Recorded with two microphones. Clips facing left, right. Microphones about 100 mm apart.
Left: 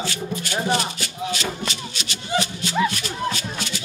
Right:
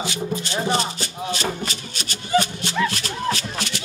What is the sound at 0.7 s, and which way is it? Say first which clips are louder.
Music: right 1 dB; 35° right (ahead or behind).